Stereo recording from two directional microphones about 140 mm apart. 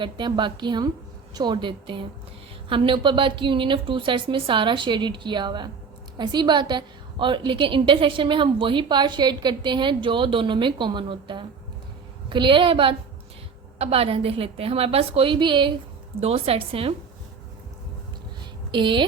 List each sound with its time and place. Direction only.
0.0 s a woman's voice: 35° right (ahead or behind)
18.7 s a woman's voice: 35° right (ahead or behind)